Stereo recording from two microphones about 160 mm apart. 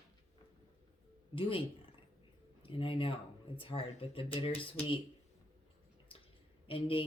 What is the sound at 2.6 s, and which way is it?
Speech, 35° left (ahead or behind).